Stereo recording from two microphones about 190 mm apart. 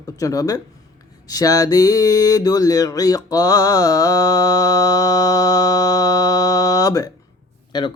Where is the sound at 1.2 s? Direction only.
20° left (ahead or behind).